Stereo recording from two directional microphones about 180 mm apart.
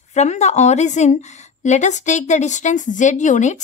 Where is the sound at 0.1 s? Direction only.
40° left (ahead or behind).